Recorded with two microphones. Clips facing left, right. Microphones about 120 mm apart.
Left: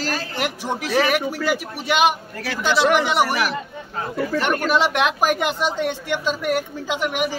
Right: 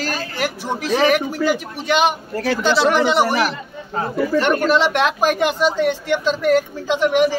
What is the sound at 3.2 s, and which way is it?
Speech, 25° right (ahead or behind).